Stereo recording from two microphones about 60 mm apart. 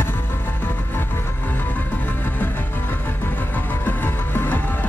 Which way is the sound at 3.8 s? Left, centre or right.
Left.